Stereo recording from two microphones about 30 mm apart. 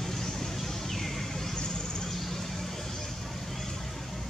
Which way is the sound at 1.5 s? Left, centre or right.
Left.